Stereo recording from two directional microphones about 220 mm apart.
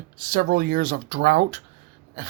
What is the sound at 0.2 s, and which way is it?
Speech, 40° right (ahead or behind).